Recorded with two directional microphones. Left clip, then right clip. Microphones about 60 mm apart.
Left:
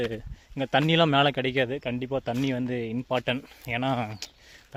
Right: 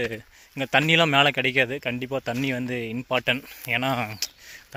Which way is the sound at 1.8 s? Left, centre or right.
Centre.